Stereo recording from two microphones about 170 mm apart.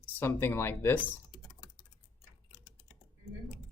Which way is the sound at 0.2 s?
15° left (ahead or behind).